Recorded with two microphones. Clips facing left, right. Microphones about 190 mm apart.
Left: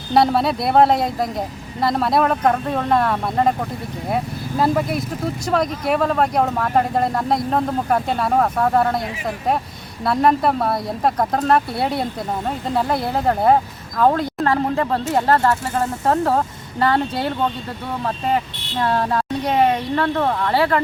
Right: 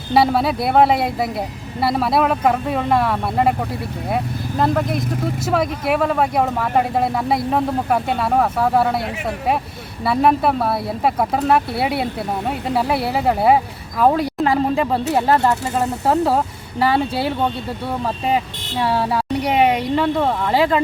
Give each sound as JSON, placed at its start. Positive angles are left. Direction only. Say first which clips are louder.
{"t": 0.1, "sound": "speech", "louder": "even", "side_deg": -5}
{"t": 10.0, "sound": "speech", "louder": "right 1 dB", "side_deg": -5}
{"t": 18.8, "sound": "speech", "louder": "even", "side_deg": -10}